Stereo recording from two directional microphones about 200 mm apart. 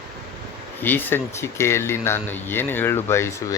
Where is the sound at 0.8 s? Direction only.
10° left (ahead or behind).